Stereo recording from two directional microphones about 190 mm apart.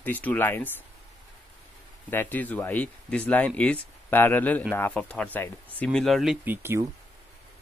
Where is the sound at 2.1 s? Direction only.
10° left (ahead or behind).